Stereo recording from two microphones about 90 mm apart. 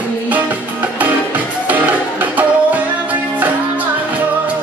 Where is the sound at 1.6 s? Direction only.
20° right (ahead or behind).